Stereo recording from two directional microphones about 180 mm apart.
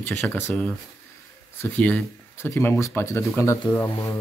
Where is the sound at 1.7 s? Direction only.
10° left (ahead or behind).